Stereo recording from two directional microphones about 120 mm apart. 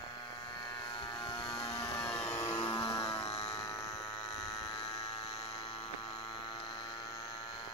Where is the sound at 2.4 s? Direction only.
35° left (ahead or behind).